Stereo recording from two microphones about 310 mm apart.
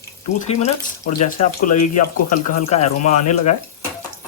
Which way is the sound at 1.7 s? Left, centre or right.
Left.